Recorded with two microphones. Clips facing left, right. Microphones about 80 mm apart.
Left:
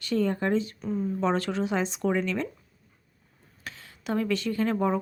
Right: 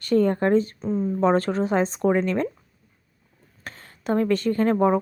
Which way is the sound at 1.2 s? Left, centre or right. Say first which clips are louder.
Right 7 dB; right.